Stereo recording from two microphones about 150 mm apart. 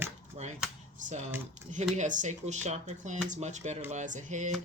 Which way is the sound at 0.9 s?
50° right (ahead or behind).